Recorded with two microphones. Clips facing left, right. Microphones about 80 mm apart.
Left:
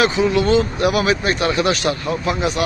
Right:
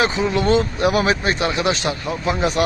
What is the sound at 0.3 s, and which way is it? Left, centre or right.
Speech, right.